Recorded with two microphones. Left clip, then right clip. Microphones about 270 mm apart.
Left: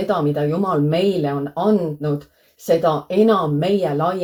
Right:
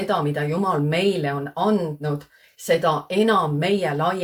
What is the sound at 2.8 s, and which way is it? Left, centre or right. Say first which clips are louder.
Speech: left 4 dB; right.